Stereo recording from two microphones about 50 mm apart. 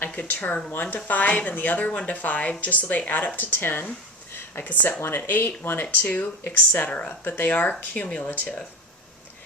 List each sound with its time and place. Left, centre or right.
0.1 s speech: left
4.9 s speech: left
5.3 s speech: left
7.3 s speech: left
7.6 s speech: left
8.3 s speech: left